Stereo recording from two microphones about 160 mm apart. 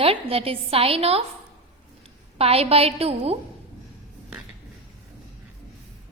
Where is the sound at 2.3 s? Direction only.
40° right (ahead or behind).